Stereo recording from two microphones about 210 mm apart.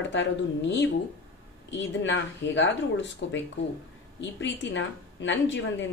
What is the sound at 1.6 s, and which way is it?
Speech, 60° left (ahead or behind).